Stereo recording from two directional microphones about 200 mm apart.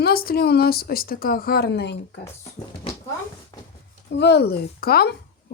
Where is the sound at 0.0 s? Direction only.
50° left (ahead or behind).